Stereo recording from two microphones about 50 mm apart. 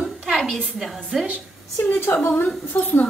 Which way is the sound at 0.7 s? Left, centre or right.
Centre.